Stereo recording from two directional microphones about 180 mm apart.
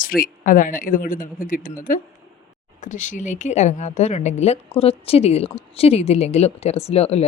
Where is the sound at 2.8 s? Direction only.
45° left (ahead or behind).